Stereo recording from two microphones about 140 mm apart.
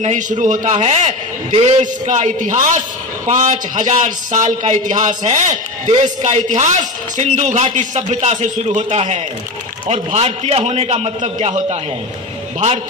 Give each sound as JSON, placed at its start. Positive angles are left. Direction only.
{"t": 0.0, "sound": "a man's voice", "side_deg": -60}